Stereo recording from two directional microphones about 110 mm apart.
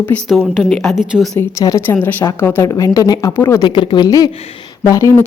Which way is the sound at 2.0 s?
15° left (ahead or behind).